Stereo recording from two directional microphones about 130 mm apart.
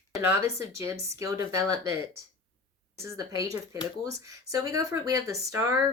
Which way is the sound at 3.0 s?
25° right (ahead or behind).